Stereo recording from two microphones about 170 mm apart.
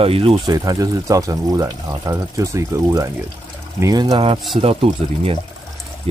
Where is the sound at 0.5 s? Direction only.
20° right (ahead or behind).